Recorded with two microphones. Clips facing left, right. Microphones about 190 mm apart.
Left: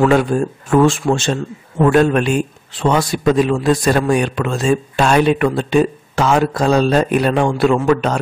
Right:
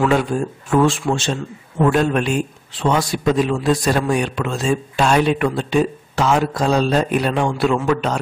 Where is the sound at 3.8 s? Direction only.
60° left (ahead or behind).